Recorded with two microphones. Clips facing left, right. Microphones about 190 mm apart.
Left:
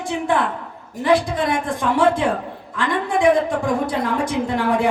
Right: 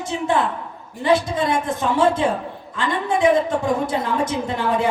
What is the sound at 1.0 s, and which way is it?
A woman's voice, 25° right (ahead or behind).